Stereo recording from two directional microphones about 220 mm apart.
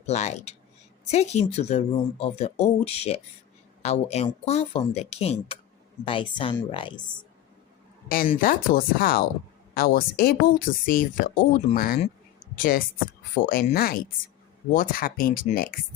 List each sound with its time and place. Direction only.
0.0 s speech: 30° left (ahead or behind)
8.0 s speech: 40° left (ahead or behind)